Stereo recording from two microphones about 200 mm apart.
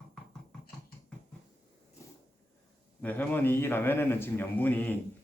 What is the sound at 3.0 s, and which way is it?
A man's voice, 10° left (ahead or behind).